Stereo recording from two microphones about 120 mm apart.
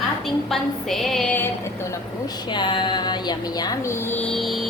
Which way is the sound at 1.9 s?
35° left (ahead or behind).